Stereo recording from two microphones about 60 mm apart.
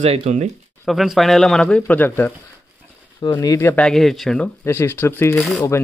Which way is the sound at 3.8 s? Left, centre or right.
Centre.